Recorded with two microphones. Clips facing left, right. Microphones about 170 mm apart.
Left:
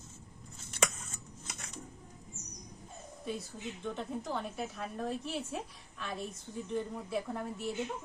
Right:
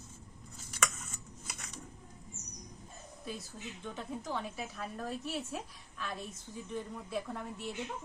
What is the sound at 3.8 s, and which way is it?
A woman's voice, centre (ahead or behind).